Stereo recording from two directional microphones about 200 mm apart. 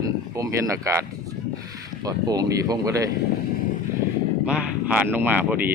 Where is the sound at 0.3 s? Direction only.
15° right (ahead or behind).